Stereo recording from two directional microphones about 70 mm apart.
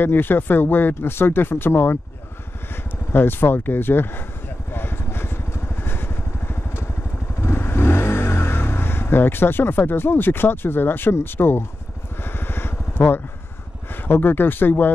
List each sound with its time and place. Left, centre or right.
0.0 s speech: left
3.1 s speech: left
4.7 s vehicle: left
14.0 s speech: left